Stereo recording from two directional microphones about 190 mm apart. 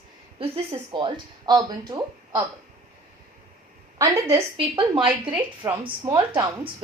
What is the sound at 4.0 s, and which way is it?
A woman's voice, 15° right (ahead or behind).